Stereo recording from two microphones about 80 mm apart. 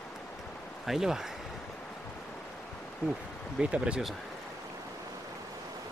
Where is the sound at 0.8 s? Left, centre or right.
Centre.